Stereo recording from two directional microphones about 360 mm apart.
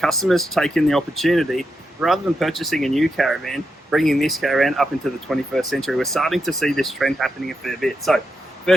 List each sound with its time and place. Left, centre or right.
0.0 s speech: centre